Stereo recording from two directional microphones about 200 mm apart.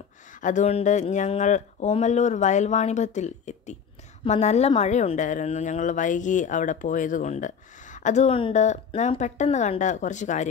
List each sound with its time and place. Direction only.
0.4 s speech: 40° left (ahead or behind)